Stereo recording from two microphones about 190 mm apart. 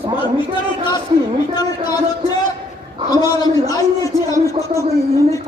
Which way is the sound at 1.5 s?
20° left (ahead or behind).